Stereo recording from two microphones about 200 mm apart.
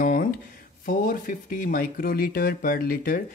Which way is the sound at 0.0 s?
40° left (ahead or behind).